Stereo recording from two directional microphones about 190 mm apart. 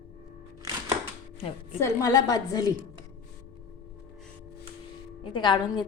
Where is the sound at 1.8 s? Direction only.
15° left (ahead or behind).